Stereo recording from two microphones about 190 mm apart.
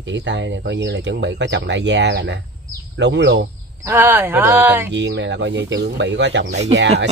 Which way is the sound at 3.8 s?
10° right (ahead or behind).